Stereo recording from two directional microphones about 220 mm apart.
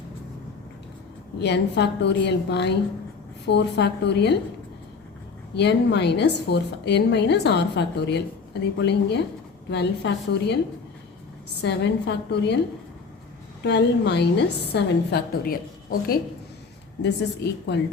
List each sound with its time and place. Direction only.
1.4 s a woman's voice: 50° left (ahead or behind)
5.5 s a woman's voice: 50° left (ahead or behind)
11.6 s a woman's voice: 50° left (ahead or behind)
13.7 s a woman's voice: 50° left (ahead or behind)